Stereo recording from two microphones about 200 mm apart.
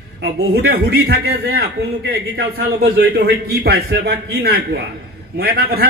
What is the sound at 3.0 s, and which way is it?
A man's voice, 50° right (ahead or behind).